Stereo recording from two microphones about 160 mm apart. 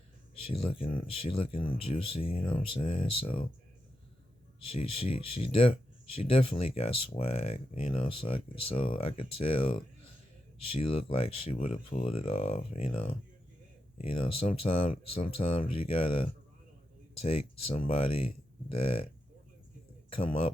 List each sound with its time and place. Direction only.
0.4 s speech: 35° left (ahead or behind)
5.3 s speech: 35° left (ahead or behind)
20.1 s speech: 35° left (ahead or behind)